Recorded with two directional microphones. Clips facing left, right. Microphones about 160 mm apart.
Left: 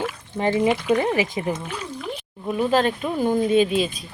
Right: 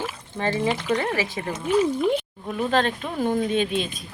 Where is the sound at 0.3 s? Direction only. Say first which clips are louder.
Left 4 dB; 15° left (ahead or behind).